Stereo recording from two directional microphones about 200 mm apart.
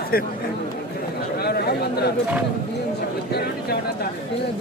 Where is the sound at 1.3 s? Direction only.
55° left (ahead or behind).